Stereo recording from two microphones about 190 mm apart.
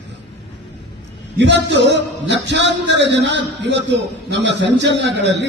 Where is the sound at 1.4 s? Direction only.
65° right (ahead or behind).